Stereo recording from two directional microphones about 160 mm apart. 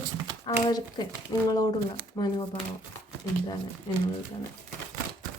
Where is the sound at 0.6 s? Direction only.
25° left (ahead or behind).